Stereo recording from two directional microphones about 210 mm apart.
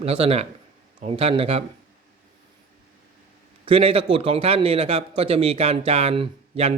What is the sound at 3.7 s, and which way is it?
A man's voice, 25° right (ahead or behind).